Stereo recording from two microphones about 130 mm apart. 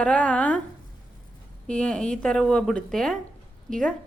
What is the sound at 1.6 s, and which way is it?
A woman's voice, 5° left (ahead or behind).